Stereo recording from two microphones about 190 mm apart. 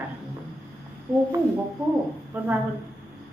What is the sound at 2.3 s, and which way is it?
Speech, 10° right (ahead or behind).